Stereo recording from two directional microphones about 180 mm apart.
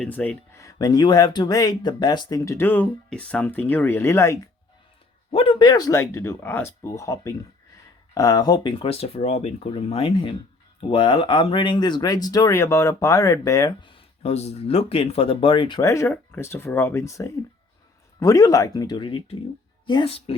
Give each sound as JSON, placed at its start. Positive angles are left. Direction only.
{"t": 0.0, "sound": "speech", "side_deg": 10}
{"t": 5.3, "sound": "speech", "side_deg": 30}